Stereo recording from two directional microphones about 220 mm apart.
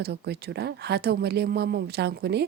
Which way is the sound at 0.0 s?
50° right (ahead or behind).